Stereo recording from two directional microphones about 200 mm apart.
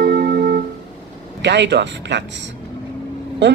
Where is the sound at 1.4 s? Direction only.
60° right (ahead or behind).